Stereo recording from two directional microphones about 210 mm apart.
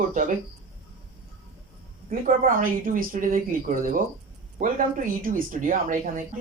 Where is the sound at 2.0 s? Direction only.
40° right (ahead or behind).